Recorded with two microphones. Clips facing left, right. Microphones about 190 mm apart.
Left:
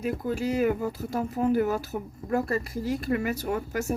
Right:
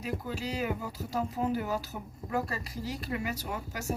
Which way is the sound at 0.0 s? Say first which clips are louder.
Left 7 dB; 55° left (ahead or behind).